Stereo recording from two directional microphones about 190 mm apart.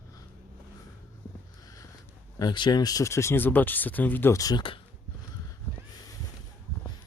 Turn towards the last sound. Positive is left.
turn(degrees=10)  # may be behind; listen again after turning